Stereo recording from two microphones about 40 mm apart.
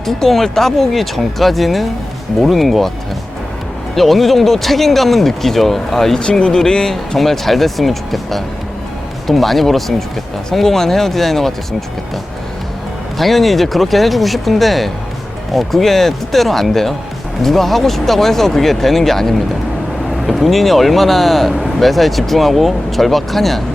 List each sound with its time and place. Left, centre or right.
0.0 s speech: centre
3.9 s speech: centre
6.1 s speech: centre
13.1 s speech: centre